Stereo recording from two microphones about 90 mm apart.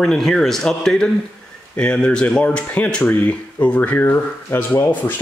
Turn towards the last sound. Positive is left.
turn(degrees=20)  # may be behind; listen again after turning